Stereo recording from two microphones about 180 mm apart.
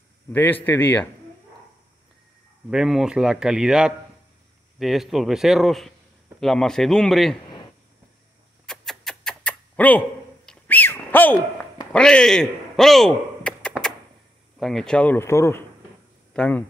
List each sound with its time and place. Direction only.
0.3 s speech: 10° left (ahead or behind)
2.7 s speech: 5° right (ahead or behind)
8.6 s a sound: 5° left (ahead or behind)
11.9 s chop: 5° left (ahead or behind)
14.6 s speech: centre (ahead or behind)